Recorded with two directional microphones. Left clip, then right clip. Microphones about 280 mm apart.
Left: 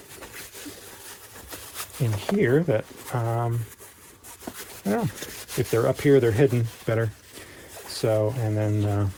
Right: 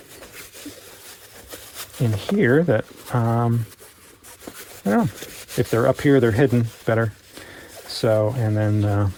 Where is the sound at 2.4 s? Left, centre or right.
Right.